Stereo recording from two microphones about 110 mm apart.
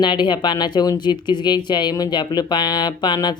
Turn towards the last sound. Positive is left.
turn(degrees=40)  # may be behind; listen again after turning